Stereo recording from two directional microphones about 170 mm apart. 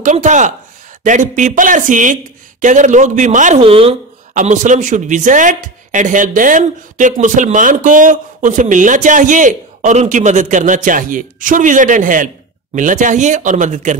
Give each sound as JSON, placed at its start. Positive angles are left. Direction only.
{"t": 0.0, "sound": "speech", "side_deg": -45}
{"t": 3.6, "sound": "speech", "side_deg": -35}
{"t": 4.3, "sound": "speech", "side_deg": -45}